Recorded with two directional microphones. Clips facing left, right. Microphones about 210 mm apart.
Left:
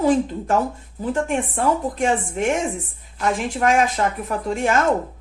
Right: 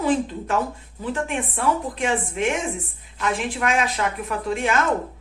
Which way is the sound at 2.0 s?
40° left (ahead or behind).